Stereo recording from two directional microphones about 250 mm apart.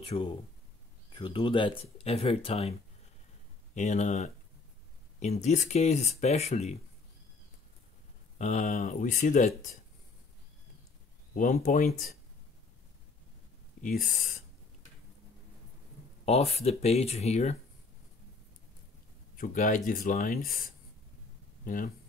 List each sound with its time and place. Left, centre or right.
0.0 s speech: left
3.7 s speech: left
8.4 s speech: left
11.3 s speech: left
13.8 s speech: left
16.3 s speech: left
19.3 s speech: left